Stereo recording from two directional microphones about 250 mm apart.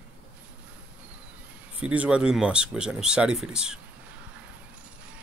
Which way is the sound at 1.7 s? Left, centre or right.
Centre.